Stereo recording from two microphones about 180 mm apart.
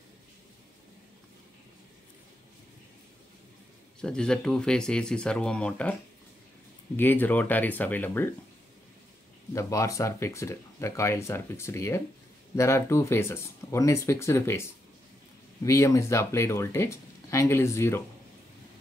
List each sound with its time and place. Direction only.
4.0 s speech: 5° left (ahead or behind)
7.0 s speech: 10° left (ahead or behind)
9.5 s speech: 15° left (ahead or behind)